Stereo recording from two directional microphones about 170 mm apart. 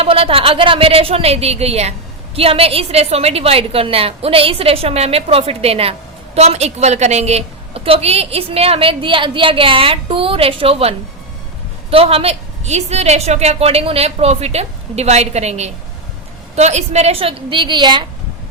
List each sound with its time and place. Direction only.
0.0 s a woman's voice: 35° right (ahead or behind)